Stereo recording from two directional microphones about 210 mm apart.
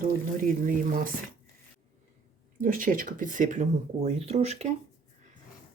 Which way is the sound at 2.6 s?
40° right (ahead or behind).